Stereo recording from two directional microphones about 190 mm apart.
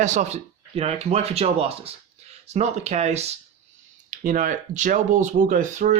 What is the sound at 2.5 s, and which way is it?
Speech, 35° right (ahead or behind).